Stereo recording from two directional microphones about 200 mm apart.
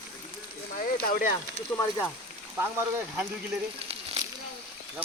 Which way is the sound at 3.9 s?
30° right (ahead or behind).